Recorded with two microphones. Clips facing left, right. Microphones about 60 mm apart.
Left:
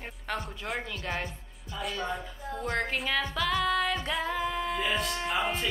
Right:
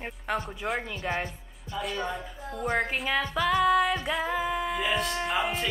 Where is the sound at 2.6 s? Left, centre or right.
Centre.